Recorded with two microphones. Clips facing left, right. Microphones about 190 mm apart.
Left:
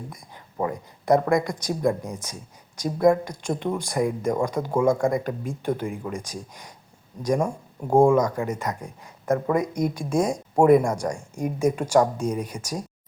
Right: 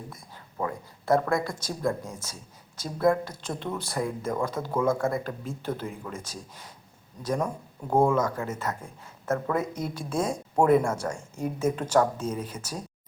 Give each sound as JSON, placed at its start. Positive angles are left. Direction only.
{"t": 0.6, "sound": "speech", "side_deg": 20}